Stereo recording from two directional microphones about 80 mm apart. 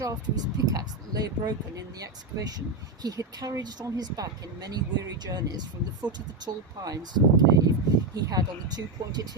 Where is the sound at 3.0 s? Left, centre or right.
Right.